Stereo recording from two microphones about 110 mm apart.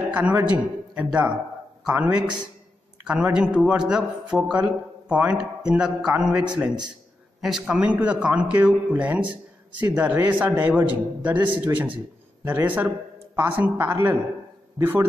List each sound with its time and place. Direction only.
0.1 s a man's voice: 10° right (ahead or behind)